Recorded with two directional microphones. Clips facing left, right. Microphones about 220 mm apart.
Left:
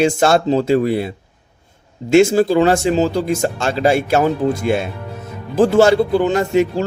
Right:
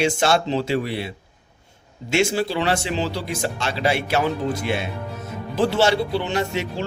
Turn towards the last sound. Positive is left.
turn(degrees=45)  # may be behind; listen again after turning